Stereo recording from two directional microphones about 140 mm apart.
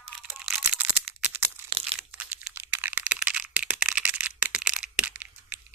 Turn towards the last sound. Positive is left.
turn(degrees=-10)  # may be behind; listen again after turning